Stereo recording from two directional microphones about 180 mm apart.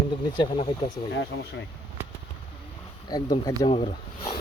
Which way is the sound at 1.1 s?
85° left.